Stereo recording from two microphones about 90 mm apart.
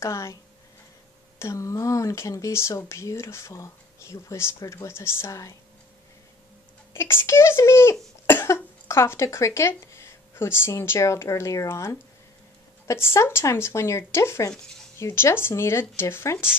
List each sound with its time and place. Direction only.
0.0 s speech: 35° left (ahead or behind)
1.4 s speech: 35° left (ahead or behind)
6.9 s speech: 25° left (ahead or behind)